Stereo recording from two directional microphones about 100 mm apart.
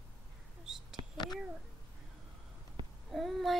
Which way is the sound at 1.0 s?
55° right (ahead or behind).